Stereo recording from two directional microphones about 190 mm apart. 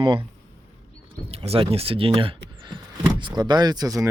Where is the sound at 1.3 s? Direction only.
30° right (ahead or behind).